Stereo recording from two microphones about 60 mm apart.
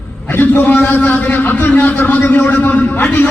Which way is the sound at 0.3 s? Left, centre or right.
Left.